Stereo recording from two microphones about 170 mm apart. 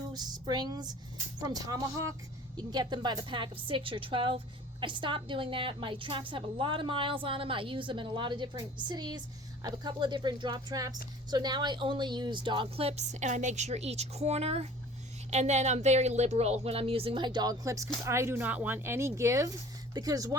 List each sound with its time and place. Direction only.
0.1 s a woman's voice: 25° right (ahead or behind)